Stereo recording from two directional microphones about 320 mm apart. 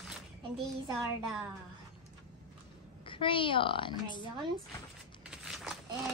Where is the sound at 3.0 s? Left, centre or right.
Centre.